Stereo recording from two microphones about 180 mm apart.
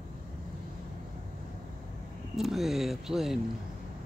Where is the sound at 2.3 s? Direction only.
Centre (ahead or behind).